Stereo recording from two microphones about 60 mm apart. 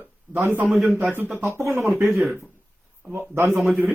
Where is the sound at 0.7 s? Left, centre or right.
Centre.